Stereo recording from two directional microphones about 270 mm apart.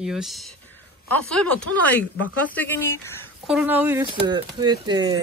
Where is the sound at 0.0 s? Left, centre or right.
Centre.